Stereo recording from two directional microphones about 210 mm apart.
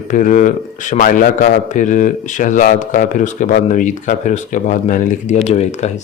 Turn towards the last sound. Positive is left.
turn(degrees=30)  # may be behind; listen again after turning